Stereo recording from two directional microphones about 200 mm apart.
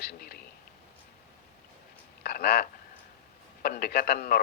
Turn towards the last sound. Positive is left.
turn(degrees=50)  # may be behind; listen again after turning